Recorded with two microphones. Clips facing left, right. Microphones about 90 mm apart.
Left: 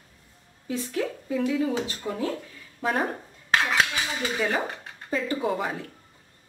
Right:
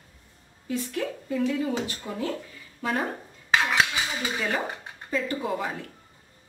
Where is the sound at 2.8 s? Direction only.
40° left (ahead or behind).